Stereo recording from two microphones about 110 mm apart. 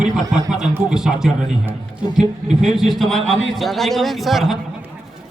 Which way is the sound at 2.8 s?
Centre (ahead or behind).